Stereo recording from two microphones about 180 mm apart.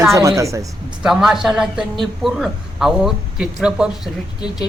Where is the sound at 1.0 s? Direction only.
5° right (ahead or behind).